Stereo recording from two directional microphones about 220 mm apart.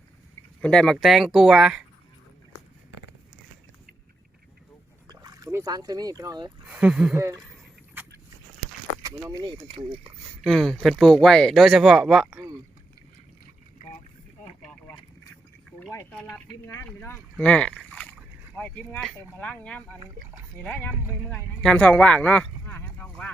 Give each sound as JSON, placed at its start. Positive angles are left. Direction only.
{"t": 0.6, "sound": "speech", "side_deg": 5}
{"t": 5.0, "sound": "a sound", "side_deg": -15}
{"t": 6.7, "sound": "speech", "side_deg": -5}
{"t": 7.2, "sound": "speech", "side_deg": -15}
{"t": 9.0, "sound": "speech", "side_deg": -15}
{"t": 10.4, "sound": "speech", "side_deg": 0}
{"t": 15.9, "sound": "speech", "side_deg": 10}